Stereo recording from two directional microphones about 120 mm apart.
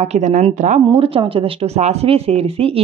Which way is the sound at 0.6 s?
90° right.